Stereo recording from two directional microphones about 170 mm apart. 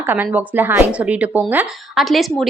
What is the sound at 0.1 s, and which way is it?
A woman's voice, 10° right (ahead or behind).